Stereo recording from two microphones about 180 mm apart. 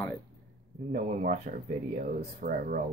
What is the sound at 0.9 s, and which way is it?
Speech, 50° right (ahead or behind).